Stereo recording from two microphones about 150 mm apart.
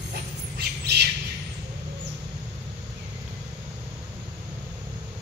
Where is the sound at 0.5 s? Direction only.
90° right.